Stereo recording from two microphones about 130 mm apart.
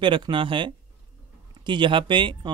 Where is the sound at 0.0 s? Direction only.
40° right (ahead or behind).